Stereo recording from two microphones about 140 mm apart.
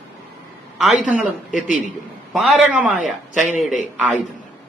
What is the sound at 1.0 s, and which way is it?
A man's voice, 5° right (ahead or behind).